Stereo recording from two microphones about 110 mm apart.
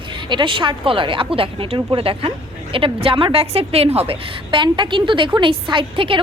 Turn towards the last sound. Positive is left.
turn(degrees=-50)  # may be behind; listen again after turning